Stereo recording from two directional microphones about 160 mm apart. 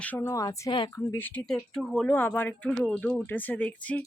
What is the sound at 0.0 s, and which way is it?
A woman's voice, 10° left (ahead or behind).